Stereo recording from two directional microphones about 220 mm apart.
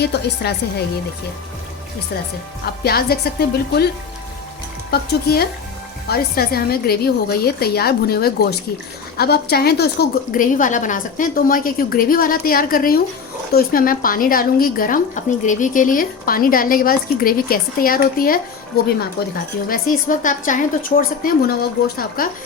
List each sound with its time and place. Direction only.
0.0 s a woman's voice: 45° left (ahead or behind)
2.8 s a woman's voice: 45° left (ahead or behind)
4.9 s a woman's voice: 45° left (ahead or behind)
19.6 s a woman's voice: 40° left (ahead or behind)